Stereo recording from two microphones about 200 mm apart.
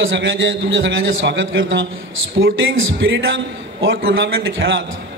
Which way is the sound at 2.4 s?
80° right.